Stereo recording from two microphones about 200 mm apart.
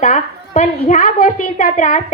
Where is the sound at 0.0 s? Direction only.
35° left (ahead or behind).